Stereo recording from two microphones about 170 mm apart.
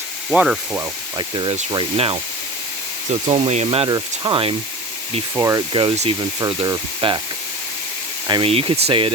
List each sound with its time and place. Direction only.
0.3 s speech: 5° right (ahead or behind)
0.8 s speech: 25° right (ahead or behind)
3.2 s speech: 35° right (ahead or behind)
8.3 s speech: 30° right (ahead or behind)